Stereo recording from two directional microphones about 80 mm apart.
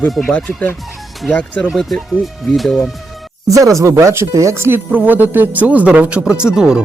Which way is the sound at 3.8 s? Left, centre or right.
Right.